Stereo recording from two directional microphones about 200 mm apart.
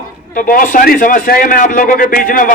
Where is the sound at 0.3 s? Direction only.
40° left (ahead or behind).